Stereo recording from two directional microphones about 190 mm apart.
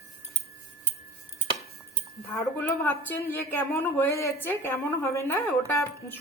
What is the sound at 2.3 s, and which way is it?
Speech, 10° left (ahead or behind).